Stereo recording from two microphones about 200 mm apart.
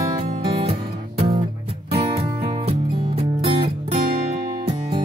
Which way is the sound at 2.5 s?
30° right (ahead or behind).